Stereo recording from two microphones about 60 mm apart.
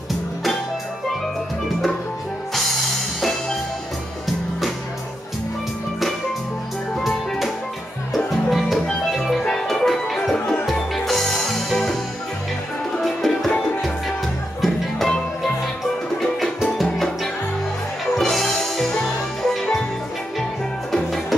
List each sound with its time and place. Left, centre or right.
2.5 s music: centre
7.0 s music: centre
10.3 s music: centre
10.7 s music: centre
13.0 s music: centre
14.6 s music: centre
16.2 s music: centre
20.9 s music: centre